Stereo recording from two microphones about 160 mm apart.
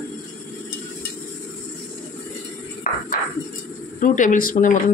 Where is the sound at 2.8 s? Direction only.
65° left (ahead or behind).